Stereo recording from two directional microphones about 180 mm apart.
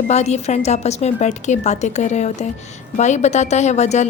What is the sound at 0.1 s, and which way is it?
A woman's voice, 40° left (ahead or behind).